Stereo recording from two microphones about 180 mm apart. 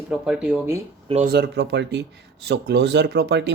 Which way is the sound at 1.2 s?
70° right (ahead or behind).